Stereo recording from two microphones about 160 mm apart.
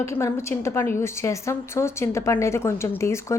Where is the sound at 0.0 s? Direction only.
20° left (ahead or behind).